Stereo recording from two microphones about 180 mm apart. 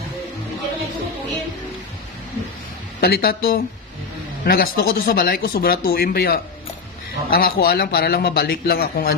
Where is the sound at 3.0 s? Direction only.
60° left (ahead or behind).